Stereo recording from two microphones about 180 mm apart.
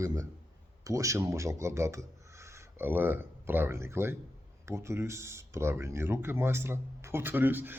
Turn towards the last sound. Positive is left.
turn(degrees=-10)  # may be behind; listen again after turning